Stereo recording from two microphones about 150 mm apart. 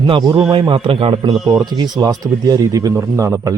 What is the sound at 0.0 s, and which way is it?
A man's voice, 30° right (ahead or behind).